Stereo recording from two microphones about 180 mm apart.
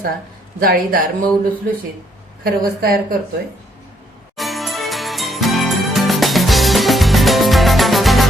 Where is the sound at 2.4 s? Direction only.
55° right (ahead or behind).